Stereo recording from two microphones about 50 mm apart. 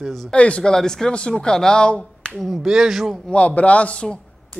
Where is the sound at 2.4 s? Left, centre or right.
Centre.